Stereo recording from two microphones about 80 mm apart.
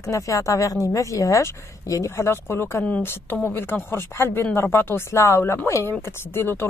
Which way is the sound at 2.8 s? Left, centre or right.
Centre.